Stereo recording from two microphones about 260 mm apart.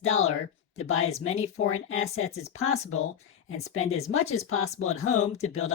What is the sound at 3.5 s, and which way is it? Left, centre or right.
Speech, left.